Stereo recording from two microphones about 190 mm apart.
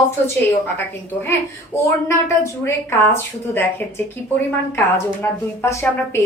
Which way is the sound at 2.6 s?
15° left (ahead or behind).